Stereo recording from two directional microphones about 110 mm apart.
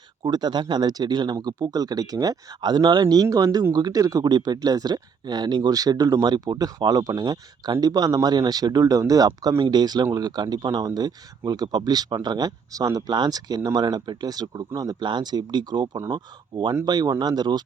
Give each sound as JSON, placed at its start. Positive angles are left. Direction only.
{"t": 0.3, "sound": "speech", "side_deg": -40}